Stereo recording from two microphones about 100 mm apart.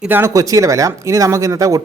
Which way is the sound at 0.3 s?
35° right (ahead or behind).